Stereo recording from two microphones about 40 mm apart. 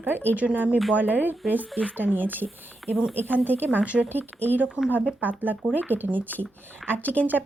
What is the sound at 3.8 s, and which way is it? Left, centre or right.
Speech, right.